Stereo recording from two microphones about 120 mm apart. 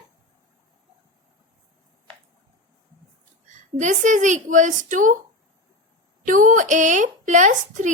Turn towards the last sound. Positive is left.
turn(degrees=-90)